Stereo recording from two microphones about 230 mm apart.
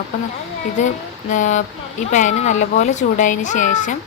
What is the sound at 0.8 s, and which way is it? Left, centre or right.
Speech, left.